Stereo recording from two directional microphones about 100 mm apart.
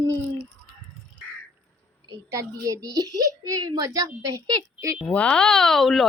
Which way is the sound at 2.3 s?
35° right (ahead or behind).